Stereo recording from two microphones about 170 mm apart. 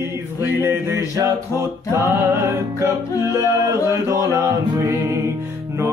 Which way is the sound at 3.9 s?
15° right (ahead or behind).